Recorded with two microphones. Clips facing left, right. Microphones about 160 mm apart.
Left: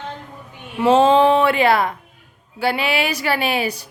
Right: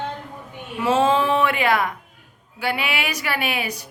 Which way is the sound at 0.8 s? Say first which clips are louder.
Left 6 dB; 30° left (ahead or behind).